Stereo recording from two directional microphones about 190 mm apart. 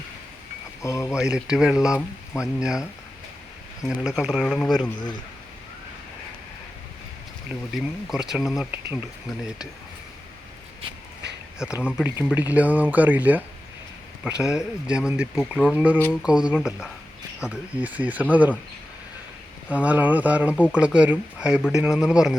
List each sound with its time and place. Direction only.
0.8 s speech: 15° left (ahead or behind)
1.1 s speech: 5° right (ahead or behind)
2.0 s speech: 15° left (ahead or behind)
2.6 s speech: 5° right (ahead or behind)
3.8 s speech: centre (ahead or behind)
4.8 s speech: 25° left (ahead or behind)
8.1 s speech: 5° right (ahead or behind)
11.6 s speech: 5° right (ahead or behind)
19.8 s speech: 10° right (ahead or behind)